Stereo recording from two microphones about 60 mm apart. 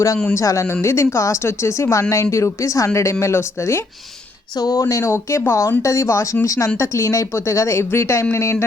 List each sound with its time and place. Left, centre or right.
0.3 s speech: left
4.5 s speech: left
5.8 s speech: left